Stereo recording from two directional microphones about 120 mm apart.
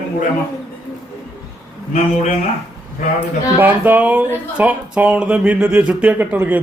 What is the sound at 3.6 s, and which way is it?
Speech, 15° right (ahead or behind).